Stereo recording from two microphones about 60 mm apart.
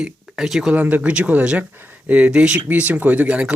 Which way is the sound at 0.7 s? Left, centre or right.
Right.